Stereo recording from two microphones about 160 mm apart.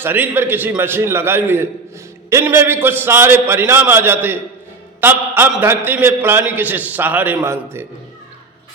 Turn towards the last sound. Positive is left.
turn(degrees=-15)  # may be behind; listen again after turning